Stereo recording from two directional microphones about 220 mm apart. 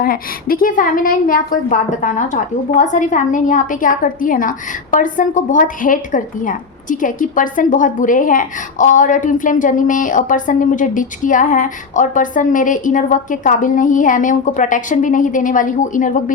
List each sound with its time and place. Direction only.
0.0 s a woman's voice: 40° left (ahead or behind)